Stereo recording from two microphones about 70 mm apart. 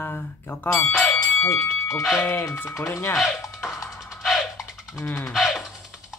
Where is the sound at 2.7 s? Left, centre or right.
Left.